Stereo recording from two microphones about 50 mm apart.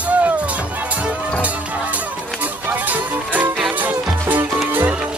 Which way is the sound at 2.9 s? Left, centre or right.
Right.